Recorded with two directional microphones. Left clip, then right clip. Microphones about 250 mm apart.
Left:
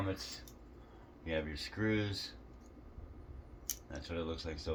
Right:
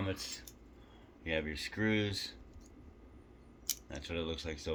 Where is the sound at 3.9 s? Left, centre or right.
Right.